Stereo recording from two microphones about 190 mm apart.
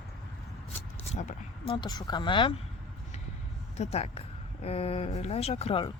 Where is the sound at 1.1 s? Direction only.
40° left (ahead or behind).